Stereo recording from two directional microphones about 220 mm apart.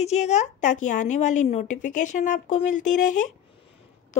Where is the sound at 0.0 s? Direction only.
30° left (ahead or behind).